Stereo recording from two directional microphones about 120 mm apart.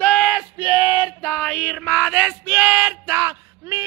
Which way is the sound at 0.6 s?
30° right (ahead or behind).